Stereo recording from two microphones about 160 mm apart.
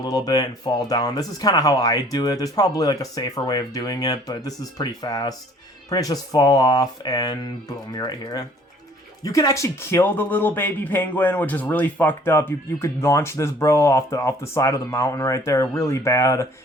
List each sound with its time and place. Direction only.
0.0 s speech: 25° left (ahead or behind)